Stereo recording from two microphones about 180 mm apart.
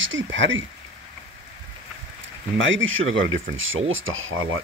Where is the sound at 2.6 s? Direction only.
90° right.